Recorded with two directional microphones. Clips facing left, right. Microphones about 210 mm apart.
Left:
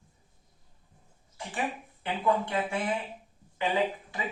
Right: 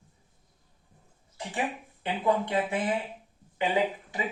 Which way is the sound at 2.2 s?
20° right (ahead or behind).